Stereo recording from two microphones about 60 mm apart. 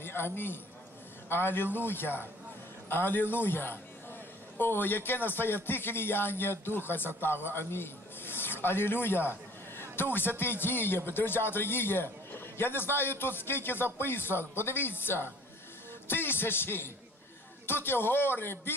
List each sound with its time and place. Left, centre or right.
0.0 s a man's voice: left